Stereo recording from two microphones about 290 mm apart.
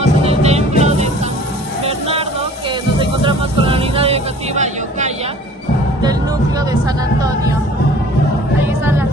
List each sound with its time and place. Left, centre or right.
0.0 s music: right
1.9 s vehicle: centre
6.7 s music: centre